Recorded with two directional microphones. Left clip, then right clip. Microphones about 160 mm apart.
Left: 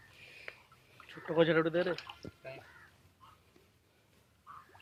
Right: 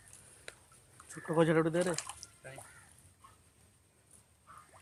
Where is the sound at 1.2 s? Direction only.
35° right (ahead or behind).